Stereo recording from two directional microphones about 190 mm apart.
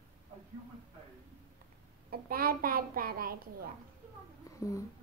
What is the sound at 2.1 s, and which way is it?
A child's voice, 50° right (ahead or behind).